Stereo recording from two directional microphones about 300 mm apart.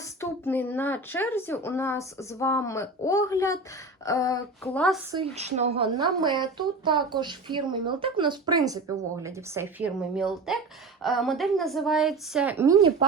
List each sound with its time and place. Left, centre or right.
0.0 s a woman's voice: centre
5.1 s a woman's voice: centre